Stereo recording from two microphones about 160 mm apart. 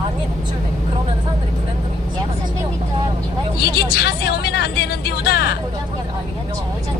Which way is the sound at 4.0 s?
90° left.